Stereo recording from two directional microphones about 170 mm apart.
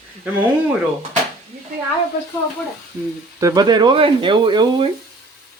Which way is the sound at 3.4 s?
20° right (ahead or behind).